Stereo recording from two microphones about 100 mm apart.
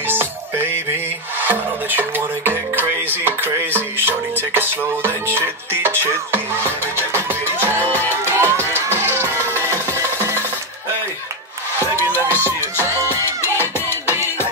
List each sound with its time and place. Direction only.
0.1 s music: 20° right (ahead or behind)
11.8 s music: 20° right (ahead or behind)
13.7 s music: 25° left (ahead or behind)